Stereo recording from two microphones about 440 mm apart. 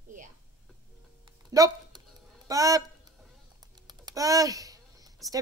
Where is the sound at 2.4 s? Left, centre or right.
Centre.